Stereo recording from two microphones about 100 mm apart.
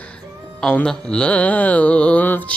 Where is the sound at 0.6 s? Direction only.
10° left (ahead or behind).